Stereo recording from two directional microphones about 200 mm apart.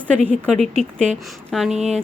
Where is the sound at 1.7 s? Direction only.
35° right (ahead or behind).